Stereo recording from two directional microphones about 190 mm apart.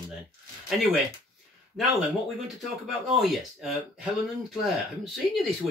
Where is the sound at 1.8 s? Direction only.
Centre (ahead or behind).